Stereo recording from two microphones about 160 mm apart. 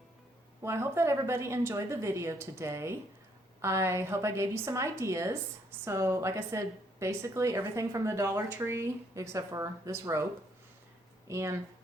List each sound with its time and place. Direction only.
0.6 s a woman's voice: 15° right (ahead or behind)
11.3 s a woman's voice: 20° right (ahead or behind)